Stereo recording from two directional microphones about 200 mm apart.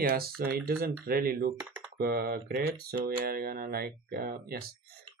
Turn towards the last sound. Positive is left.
turn(degrees=-45)  # may be behind; listen again after turning